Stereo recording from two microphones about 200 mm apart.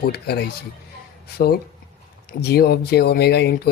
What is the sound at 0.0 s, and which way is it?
Speech, 50° left (ahead or behind).